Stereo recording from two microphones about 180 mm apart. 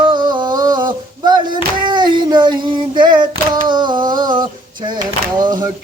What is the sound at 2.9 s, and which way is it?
Female singing, 25° right (ahead or behind).